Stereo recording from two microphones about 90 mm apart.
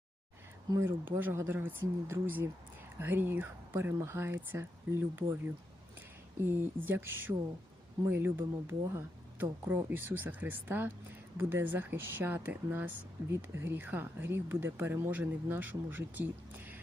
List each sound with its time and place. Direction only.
0.8 s speech: 25° right (ahead or behind)
6.8 s speech: 25° right (ahead or behind)